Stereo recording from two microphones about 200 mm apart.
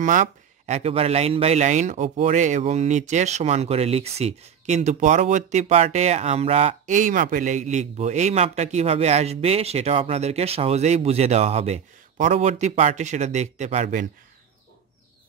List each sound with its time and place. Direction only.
0.0 s speech: 40° right (ahead or behind)